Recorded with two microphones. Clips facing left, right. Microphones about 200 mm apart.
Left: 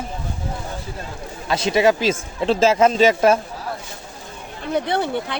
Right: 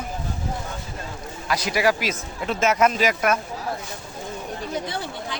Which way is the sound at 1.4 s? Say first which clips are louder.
Left 5 dB; 25° left (ahead or behind).